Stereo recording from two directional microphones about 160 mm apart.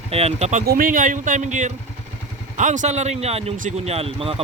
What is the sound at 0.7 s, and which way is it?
Speech, 60° right (ahead or behind).